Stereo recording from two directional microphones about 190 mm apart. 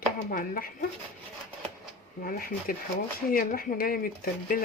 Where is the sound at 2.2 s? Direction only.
50° left (ahead or behind).